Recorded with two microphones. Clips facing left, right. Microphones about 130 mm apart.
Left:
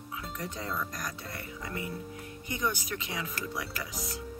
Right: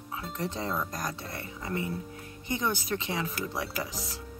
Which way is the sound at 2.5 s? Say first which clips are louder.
Right 3 dB; 30° right (ahead or behind).